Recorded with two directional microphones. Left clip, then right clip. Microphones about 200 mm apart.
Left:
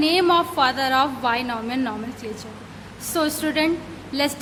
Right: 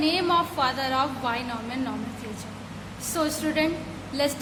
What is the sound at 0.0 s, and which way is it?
A woman's voice, 25° left (ahead or behind).